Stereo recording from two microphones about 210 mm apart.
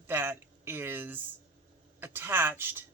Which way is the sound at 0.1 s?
10° right (ahead or behind).